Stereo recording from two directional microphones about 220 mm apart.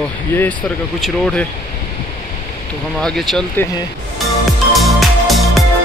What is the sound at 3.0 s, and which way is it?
Speech, centre (ahead or behind).